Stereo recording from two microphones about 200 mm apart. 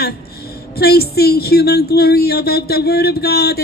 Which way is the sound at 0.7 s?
50° left (ahead or behind).